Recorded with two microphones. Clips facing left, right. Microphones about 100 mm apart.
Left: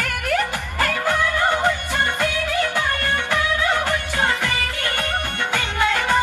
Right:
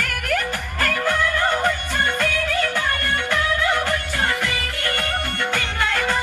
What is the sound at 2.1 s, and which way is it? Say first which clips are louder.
Music of bollywood: even; 15° left (ahead or behind).